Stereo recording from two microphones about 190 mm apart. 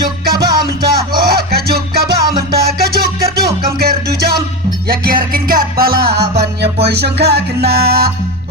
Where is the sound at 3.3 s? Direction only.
50° right (ahead or behind).